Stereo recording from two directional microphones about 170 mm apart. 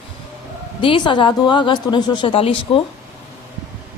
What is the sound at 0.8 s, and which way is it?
A woman's voice, 30° left (ahead or behind).